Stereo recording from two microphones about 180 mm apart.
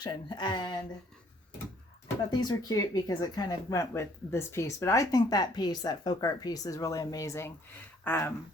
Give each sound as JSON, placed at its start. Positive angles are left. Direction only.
{"t": 0.0, "sound": "speech", "side_deg": 25}
{"t": 2.4, "sound": "speech", "side_deg": 20}